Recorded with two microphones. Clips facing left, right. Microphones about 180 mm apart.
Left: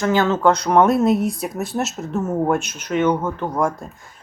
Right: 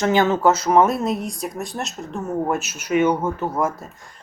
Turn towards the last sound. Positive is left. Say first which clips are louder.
# left 2 dB
turn(degrees=-5)  # may be behind; listen again after turning